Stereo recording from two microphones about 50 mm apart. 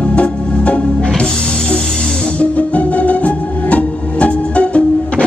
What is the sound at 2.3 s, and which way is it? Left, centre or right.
Music, left.